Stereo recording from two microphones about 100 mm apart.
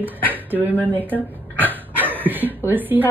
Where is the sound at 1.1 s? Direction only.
20° right (ahead or behind).